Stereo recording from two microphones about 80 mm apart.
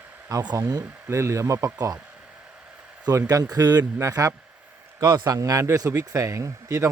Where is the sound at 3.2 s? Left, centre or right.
Right.